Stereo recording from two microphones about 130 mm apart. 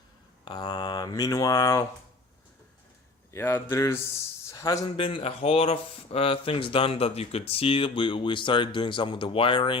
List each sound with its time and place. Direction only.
0.4 s mantra: 35° left (ahead or behind)
3.3 s speech: 20° left (ahead or behind)
4.9 s speech: 40° left (ahead or behind)